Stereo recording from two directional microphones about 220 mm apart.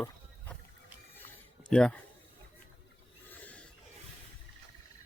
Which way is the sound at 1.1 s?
10° left (ahead or behind).